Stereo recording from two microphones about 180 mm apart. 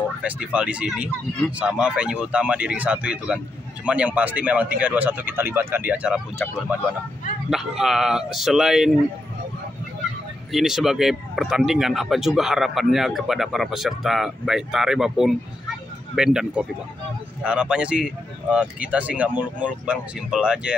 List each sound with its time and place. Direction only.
0.2 s speech: 5° right (ahead or behind)
7.4 s speech: centre (ahead or behind)
10.5 s speech: centre (ahead or behind)